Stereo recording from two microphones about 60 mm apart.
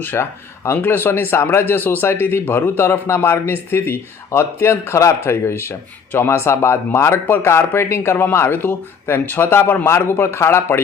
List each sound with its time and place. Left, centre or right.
0.0 s a man's voice: left